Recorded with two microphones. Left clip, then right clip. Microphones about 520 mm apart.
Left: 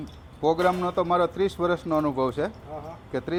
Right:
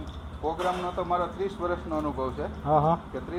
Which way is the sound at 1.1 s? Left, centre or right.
Left.